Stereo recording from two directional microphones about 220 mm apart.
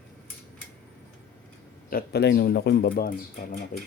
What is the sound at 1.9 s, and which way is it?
Speech, 45° left (ahead or behind).